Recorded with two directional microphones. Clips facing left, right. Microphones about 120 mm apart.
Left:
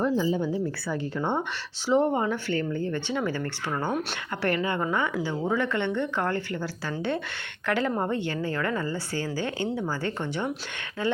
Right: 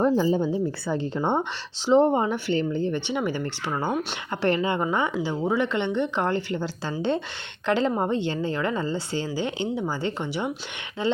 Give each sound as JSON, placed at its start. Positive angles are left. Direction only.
{"t": 0.3, "sound": "speech", "side_deg": -25}